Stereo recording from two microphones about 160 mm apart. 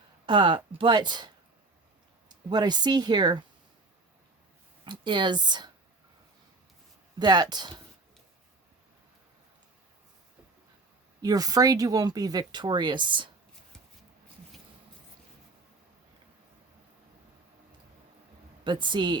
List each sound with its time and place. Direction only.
0.3 s speech: 30° right (ahead or behind)
2.3 s speech: 25° right (ahead or behind)
4.9 s speech: 30° right (ahead or behind)
7.2 s speech: 25° right (ahead or behind)
11.2 s speech: 25° right (ahead or behind)
18.6 s speech: 30° right (ahead or behind)